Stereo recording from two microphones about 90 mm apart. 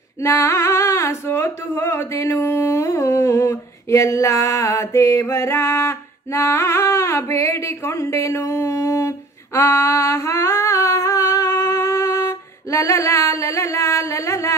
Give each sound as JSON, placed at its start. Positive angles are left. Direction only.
{"t": 0.2, "sound": "female singing", "side_deg": 30}